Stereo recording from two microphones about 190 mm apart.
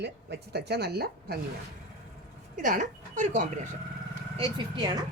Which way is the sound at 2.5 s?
45° right (ahead or behind).